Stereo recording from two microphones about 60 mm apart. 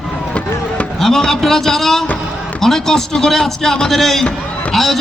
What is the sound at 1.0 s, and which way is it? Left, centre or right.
A man's voice, centre.